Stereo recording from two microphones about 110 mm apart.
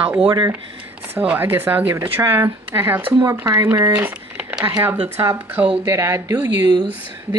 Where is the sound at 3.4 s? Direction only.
30° right (ahead or behind).